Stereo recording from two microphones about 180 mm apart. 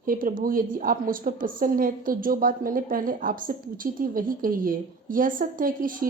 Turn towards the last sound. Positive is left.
turn(degrees=-50)  # may be behind; listen again after turning